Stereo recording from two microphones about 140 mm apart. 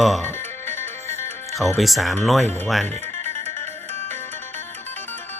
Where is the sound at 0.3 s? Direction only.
15° left (ahead or behind).